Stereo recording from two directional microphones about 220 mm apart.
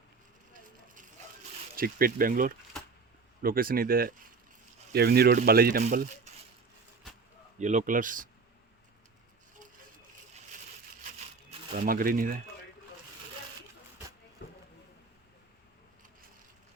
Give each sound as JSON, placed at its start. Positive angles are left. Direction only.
{"t": 1.7, "sound": "speech", "side_deg": -40}
{"t": 7.6, "sound": "speech", "side_deg": -35}
{"t": 11.9, "sound": "speech", "side_deg": -40}
{"t": 14.4, "sound": "a sound", "side_deg": 50}